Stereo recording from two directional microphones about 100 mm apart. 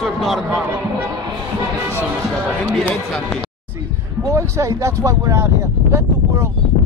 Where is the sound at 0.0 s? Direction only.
Centre (ahead or behind).